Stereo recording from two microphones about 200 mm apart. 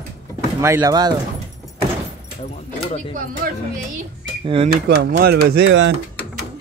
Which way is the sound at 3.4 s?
50° right (ahead or behind).